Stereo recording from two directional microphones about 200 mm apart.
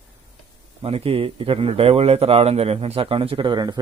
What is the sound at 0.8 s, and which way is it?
A man's voice, 30° right (ahead or behind).